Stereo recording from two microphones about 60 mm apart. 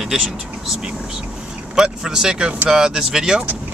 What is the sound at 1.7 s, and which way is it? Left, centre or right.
Speech, centre.